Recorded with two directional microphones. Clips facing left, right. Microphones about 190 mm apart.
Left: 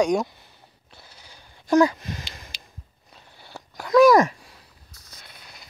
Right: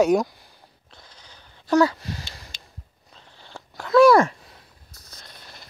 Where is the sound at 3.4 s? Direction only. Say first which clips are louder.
Even; 10° left (ahead or behind).